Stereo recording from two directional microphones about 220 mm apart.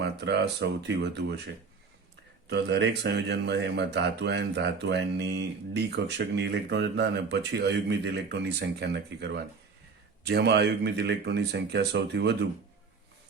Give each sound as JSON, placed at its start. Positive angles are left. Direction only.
{"t": 0.0, "sound": "speech", "side_deg": -50}
{"t": 2.5, "sound": "speech", "side_deg": -50}